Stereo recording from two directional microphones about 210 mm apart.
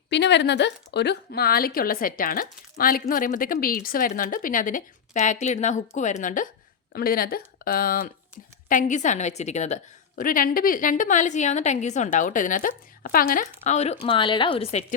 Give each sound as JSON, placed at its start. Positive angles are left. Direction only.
{"t": 0.1, "sound": "a woman's voice", "side_deg": 55}